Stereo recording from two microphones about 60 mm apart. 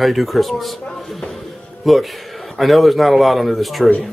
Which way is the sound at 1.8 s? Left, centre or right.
Centre.